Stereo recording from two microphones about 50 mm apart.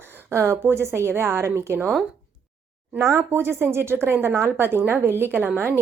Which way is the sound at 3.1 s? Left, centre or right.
Right.